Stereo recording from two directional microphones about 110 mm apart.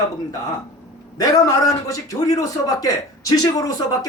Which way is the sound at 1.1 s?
35° left (ahead or behind).